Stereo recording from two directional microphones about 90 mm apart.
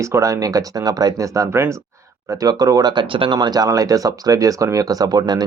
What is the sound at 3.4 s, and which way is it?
Speech, 45° right (ahead or behind).